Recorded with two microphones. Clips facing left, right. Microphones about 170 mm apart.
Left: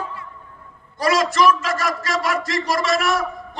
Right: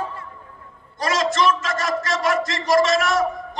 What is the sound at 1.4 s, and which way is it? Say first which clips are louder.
Speech: left 3 dB; 25° right (ahead or behind).